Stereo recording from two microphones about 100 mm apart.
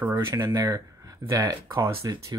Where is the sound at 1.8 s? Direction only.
30° right (ahead or behind).